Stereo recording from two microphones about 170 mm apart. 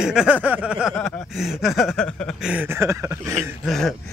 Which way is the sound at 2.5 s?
15° right (ahead or behind).